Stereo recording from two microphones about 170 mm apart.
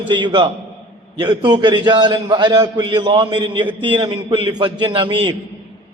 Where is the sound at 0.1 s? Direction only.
30° right (ahead or behind).